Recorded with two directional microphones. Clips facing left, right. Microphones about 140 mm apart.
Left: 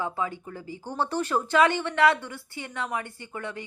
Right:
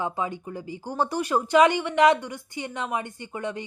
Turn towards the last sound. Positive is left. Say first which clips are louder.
# right 4 dB
turn(degrees=-20)  # may be behind; listen again after turning